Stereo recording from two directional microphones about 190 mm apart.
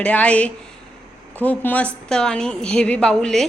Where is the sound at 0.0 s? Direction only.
5° left (ahead or behind).